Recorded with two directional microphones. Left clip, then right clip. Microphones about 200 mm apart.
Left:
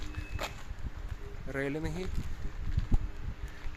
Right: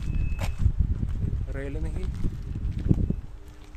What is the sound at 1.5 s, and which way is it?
Speech, 30° left (ahead or behind).